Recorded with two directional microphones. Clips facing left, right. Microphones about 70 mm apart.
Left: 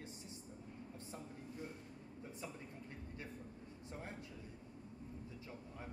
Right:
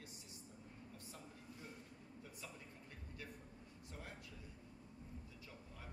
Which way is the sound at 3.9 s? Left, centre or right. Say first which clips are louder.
Left 5 dB; left.